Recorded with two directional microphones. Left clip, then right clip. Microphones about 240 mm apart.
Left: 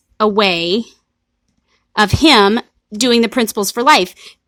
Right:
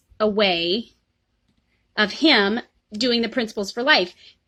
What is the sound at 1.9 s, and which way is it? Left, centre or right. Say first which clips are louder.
A woman's voice: left 7 dB; left.